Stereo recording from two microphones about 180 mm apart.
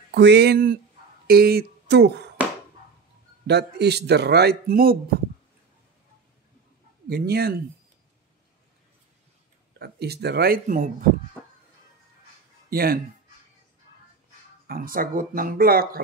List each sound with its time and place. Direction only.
0.1 s a man's voice: 65° right (ahead or behind)
3.4 s a man's voice: 70° right (ahead or behind)
7.1 s a man's voice: 60° right (ahead or behind)
9.8 s a man's voice: 65° right (ahead or behind)
12.6 s speech: 55° right (ahead or behind)
14.7 s speech: 50° right (ahead or behind)